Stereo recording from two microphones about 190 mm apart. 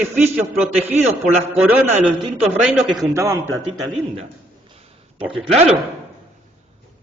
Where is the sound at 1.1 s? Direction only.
35° right (ahead or behind).